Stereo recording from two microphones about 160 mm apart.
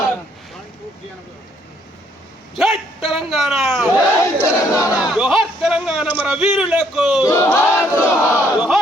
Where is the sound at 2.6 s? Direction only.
Centre (ahead or behind).